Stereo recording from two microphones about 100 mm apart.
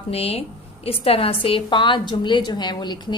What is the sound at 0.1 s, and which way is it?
A woman's voice, 80° left.